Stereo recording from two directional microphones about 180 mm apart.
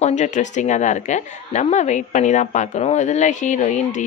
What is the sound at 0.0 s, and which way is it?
A woman's voice, 40° left (ahead or behind).